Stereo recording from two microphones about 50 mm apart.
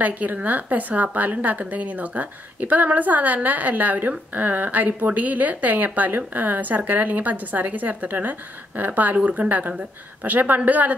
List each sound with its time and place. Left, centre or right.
0.0 s a woman's voice: right